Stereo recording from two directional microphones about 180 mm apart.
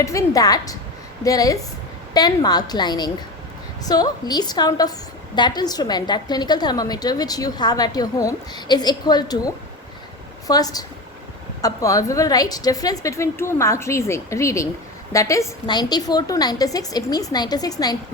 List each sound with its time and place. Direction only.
0.0 s a woman's voice: 15° left (ahead or behind)
10.4 s a woman's voice: 20° left (ahead or behind)